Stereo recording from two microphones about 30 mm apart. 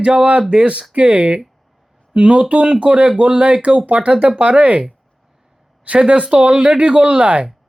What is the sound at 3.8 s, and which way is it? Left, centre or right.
Speech, right.